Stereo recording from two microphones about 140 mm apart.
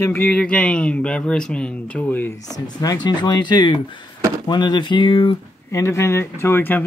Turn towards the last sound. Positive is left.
turn(degrees=15)  # may be behind; listen again after turning